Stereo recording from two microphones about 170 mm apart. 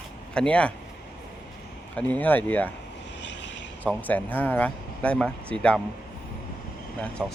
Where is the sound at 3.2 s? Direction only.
90° left.